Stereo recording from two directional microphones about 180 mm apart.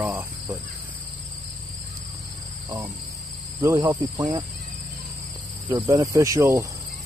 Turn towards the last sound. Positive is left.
turn(degrees=-15)  # may be behind; listen again after turning